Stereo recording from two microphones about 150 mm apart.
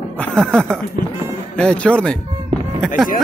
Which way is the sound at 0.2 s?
5° left (ahead or behind).